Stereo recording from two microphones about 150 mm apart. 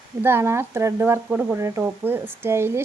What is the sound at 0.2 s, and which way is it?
Speech, 15° right (ahead or behind).